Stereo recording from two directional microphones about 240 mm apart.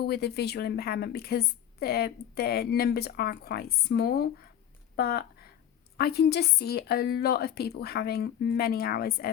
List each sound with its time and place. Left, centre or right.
0.0 s a woman's voice: left